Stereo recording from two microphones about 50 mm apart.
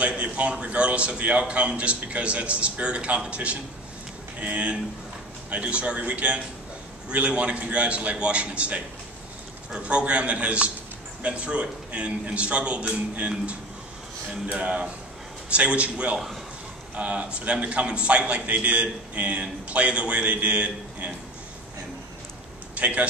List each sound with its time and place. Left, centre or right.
0.0 s a man's voice: right
14.3 s a man's voice: right
22.8 s speech: right